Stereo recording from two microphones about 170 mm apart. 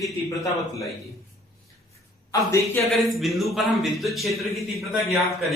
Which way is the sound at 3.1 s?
Centre (ahead or behind).